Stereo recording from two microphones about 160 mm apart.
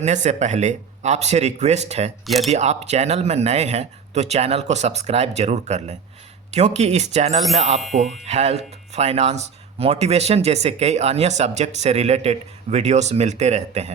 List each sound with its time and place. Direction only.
0.0 s speech: 45° right (ahead or behind)
2.2 s speech: centre (ahead or behind)
2.5 s speech: 45° right (ahead or behind)